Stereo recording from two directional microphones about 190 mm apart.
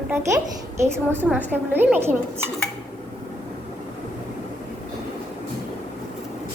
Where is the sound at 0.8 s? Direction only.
10° right (ahead or behind).